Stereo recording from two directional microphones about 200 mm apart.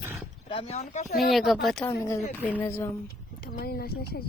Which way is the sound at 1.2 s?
Centre (ahead or behind).